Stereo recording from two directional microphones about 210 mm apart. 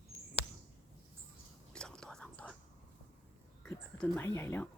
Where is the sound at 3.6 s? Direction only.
10° left (ahead or behind).